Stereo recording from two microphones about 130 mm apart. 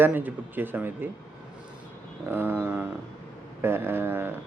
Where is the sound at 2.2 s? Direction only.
15° right (ahead or behind).